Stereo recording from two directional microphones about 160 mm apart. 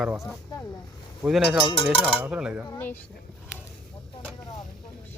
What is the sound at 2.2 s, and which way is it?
Speech, 5° right (ahead or behind).